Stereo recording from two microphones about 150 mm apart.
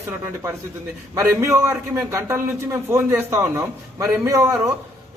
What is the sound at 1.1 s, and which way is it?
Speech, 20° right (ahead or behind).